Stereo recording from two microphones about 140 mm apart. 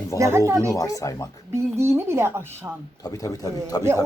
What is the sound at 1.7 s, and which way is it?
Speech, 20° right (ahead or behind).